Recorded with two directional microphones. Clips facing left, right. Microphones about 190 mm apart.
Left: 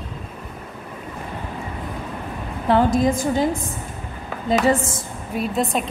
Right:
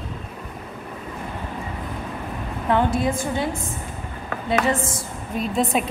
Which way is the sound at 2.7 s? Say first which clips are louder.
Left 4 dB; 35° left (ahead or behind).